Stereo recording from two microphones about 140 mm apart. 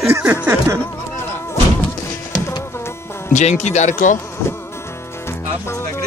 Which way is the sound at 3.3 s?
55° left (ahead or behind).